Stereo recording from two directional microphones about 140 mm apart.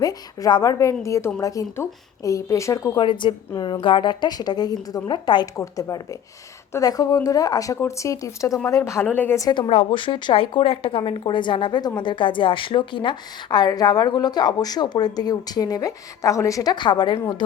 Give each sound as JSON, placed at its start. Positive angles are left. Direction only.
{"t": 0.0, "sound": "speech", "side_deg": 25}
{"t": 3.0, "sound": "speech", "side_deg": 35}
{"t": 9.6, "sound": "speech", "side_deg": 40}